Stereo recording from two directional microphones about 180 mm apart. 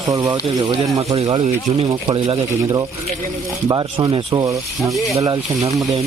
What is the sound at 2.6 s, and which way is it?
Speech, 20° right (ahead or behind).